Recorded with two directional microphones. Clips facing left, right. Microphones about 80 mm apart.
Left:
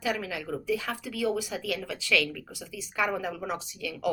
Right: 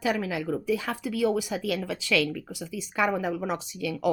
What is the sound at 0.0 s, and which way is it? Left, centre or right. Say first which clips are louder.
Speech: right 4 dB; right.